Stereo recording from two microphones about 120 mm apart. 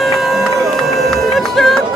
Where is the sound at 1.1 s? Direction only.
Centre (ahead or behind).